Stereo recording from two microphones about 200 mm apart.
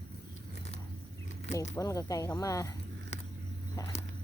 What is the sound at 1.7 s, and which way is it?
Speech, 15° left (ahead or behind).